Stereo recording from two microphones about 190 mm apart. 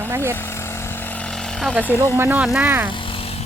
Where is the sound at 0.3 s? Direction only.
10° left (ahead or behind).